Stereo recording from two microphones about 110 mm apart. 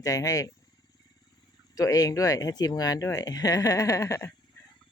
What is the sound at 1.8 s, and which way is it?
Speech, 35° left (ahead or behind).